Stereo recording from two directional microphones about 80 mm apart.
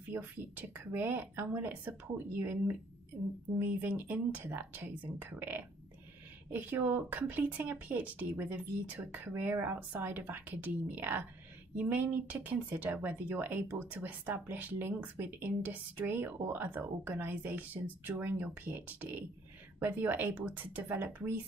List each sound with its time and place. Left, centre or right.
0.1 s speech: right
9.4 s speech: right